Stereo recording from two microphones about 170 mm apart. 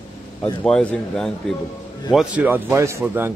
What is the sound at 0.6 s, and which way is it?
Speech, 5° left (ahead or behind).